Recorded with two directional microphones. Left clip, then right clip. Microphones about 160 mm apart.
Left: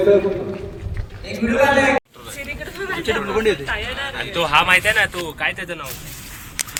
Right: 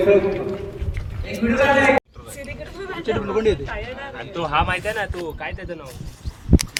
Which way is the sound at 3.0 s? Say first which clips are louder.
Left 1 dB; 20° right (ahead or behind).